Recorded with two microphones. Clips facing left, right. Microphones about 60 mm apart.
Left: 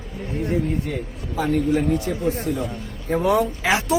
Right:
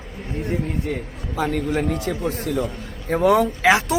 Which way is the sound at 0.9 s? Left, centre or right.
Right.